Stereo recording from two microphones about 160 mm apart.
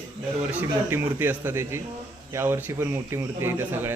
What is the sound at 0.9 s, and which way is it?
Speech, 15° right (ahead or behind).